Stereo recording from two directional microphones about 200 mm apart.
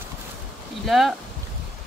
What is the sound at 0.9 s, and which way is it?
Speech, centre (ahead or behind).